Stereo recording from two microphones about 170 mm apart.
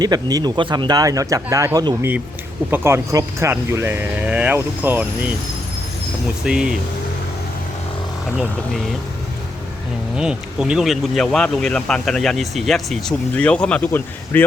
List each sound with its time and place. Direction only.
0.0 s speech: 25° right (ahead or behind)
6.4 s speech: 5° right (ahead or behind)
10.2 s speech: 5° right (ahead or behind)